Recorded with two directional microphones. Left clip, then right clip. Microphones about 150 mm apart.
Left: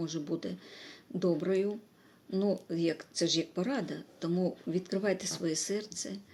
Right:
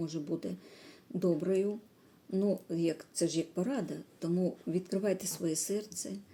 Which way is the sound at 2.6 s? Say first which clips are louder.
Left 1 dB; 20° right (ahead or behind).